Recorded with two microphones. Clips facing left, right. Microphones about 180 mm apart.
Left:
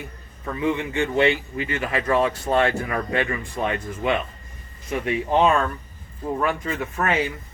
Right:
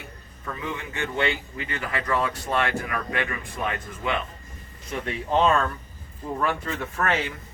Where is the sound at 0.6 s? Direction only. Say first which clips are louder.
Left 9 dB; 25° left (ahead or behind).